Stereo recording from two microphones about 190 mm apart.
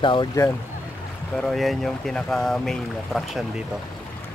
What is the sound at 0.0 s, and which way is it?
Speech, 25° left (ahead or behind).